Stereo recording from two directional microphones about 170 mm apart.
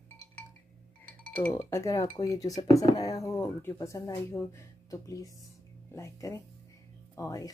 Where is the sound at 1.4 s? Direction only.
15° left (ahead or behind).